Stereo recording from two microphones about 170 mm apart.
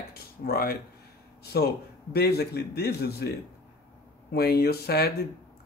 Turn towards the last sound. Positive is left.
turn(degrees=65)  # may be behind; listen again after turning